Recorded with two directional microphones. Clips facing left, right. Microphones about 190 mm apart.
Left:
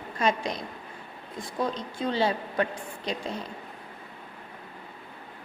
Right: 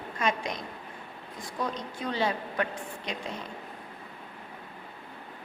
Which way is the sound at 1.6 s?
30° left (ahead or behind).